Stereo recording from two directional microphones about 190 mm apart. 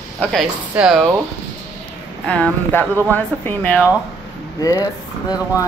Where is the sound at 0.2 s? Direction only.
Centre (ahead or behind).